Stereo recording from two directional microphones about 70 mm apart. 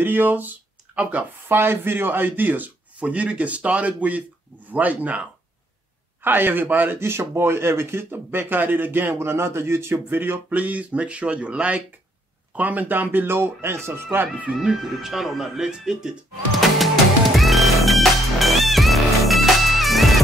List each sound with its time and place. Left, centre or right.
0.0 s speech: right
6.2 s speech: right
7.0 s speech: right
14.6 s speech: centre
16.5 s music: centre